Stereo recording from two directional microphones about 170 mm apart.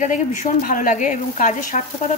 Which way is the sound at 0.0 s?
50° left (ahead or behind).